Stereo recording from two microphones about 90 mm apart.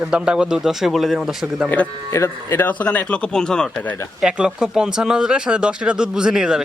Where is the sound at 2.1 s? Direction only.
25° left (ahead or behind); by 3.8 s 10° left (ahead or behind).